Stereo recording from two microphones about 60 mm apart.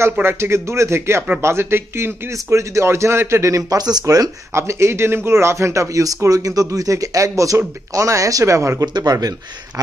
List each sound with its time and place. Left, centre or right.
0.2 s speech: right
2.3 s a man's voice: right
4.6 s a man's voice: right
9.0 s speech: right